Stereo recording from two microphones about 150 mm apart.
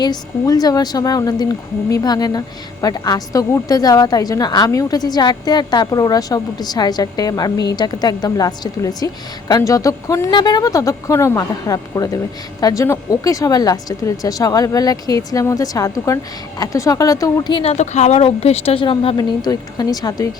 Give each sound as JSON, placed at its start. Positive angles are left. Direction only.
{"t": 0.0, "sound": "a woman's voice", "side_deg": 25}
{"t": 17.5, "sound": "speech", "side_deg": 40}